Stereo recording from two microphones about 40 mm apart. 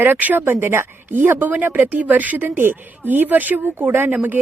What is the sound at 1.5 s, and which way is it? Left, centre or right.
Speech, right.